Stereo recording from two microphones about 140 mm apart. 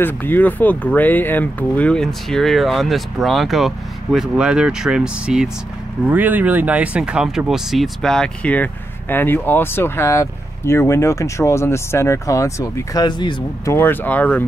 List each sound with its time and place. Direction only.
0.0 s speech: 15° left (ahead or behind); by 13.7 s 30° left (ahead or behind)
13.7 s speech: 15° left (ahead or behind)